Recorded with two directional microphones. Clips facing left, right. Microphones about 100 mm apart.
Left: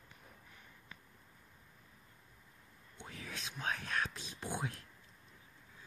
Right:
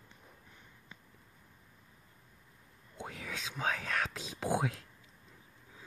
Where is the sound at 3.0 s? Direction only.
90° right.